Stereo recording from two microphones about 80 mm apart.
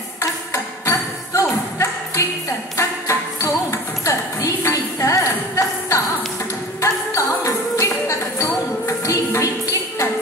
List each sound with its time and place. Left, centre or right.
0.2 s ping: left
2.8 s music: left
6.8 s jingle bell: left